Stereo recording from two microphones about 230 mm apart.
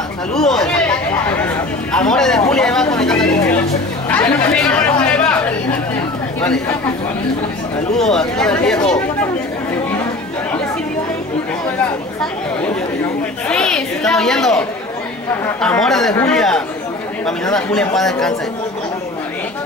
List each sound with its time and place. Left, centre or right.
0.3 s chatter: centre
7.9 s a woman's voice: centre
8.7 s speech: centre
13.5 s a woman's voice: centre